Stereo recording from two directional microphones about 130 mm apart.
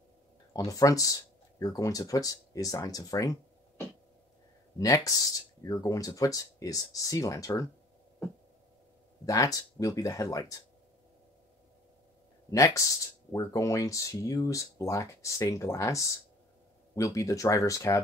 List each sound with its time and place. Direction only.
0.7 s speech: 25° left (ahead or behind)
4.7 s speech: 25° left (ahead or behind)
9.2 s speech: 25° left (ahead or behind)
12.4 s speech: 25° left (ahead or behind)